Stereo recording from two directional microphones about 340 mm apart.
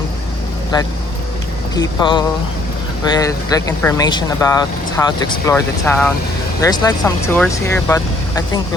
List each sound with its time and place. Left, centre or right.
1.7 s speech: centre